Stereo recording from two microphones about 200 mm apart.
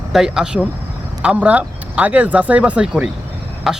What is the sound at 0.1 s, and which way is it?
Speech, 5° right (ahead or behind).